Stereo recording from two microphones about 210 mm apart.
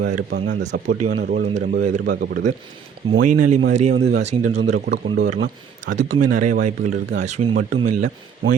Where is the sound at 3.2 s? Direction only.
40° right (ahead or behind).